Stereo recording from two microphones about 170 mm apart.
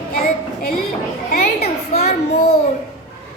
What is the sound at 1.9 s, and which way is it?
Speech, 40° left (ahead or behind).